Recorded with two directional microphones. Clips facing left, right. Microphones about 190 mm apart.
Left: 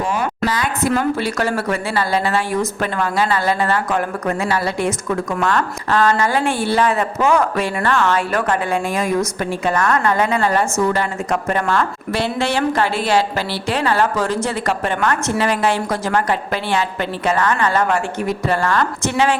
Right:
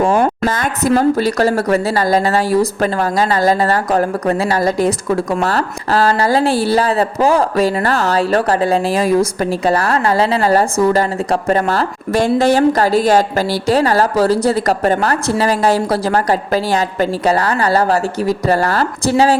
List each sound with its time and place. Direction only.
0.0 s speech: 50° right (ahead or behind)